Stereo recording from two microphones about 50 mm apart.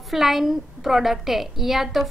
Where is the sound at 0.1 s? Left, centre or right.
Centre.